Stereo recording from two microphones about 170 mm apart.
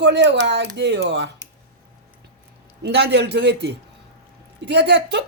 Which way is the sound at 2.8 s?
75° right (ahead or behind).